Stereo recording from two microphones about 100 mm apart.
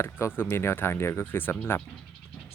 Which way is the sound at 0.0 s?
25° left (ahead or behind).